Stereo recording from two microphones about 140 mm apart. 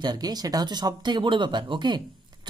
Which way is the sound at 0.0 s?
30° right (ahead or behind).